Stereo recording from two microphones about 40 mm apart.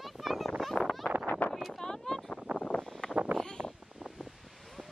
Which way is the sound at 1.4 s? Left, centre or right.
Left.